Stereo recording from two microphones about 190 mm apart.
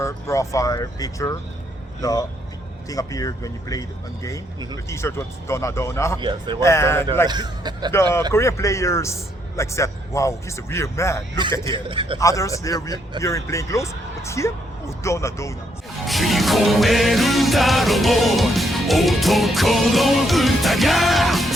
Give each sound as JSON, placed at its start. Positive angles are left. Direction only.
{"t": 0.0, "sound": "a man's voice", "side_deg": 15}
{"t": 6.1, "sound": "a man's voice", "side_deg": -25}
{"t": 6.6, "sound": "a man's voice", "side_deg": 15}
{"t": 7.3, "sound": "a man's voice", "side_deg": -20}
{"t": 8.3, "sound": "a man's voice", "side_deg": 15}
{"t": 11.9, "sound": "a man's voice", "side_deg": -25}
{"t": 12.2, "sound": "a man's voice", "side_deg": 15}
{"t": 16.0, "sound": "music", "side_deg": 0}